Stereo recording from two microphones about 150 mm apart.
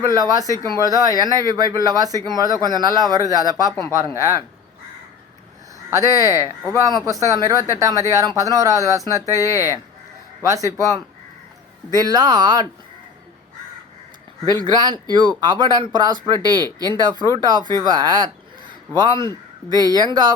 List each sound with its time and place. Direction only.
0.0 s speech: 25° right (ahead or behind)
0.4 s speech: 20° left (ahead or behind)
0.7 s speech: 25° right (ahead or behind)
6.1 s speech: 20° right (ahead or behind)
10.4 s speech: 20° right (ahead or behind)
14.5 s speech: 25° right (ahead or behind)